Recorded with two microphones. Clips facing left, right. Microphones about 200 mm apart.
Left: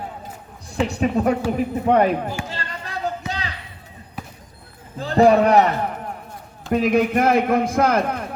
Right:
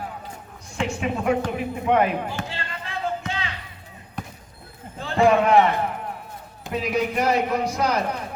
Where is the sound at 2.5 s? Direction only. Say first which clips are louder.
Left 2 dB; 40° left (ahead or behind).